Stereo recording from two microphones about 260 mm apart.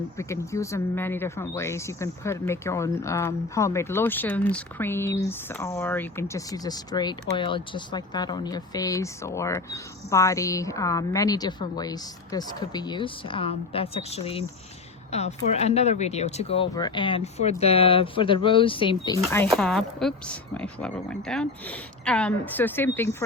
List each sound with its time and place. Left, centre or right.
0.2 s speech: centre